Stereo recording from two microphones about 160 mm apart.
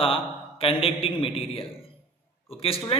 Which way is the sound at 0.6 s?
35° left (ahead or behind).